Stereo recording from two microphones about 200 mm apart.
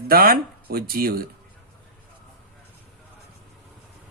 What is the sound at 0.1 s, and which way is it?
Speech, 50° right (ahead or behind).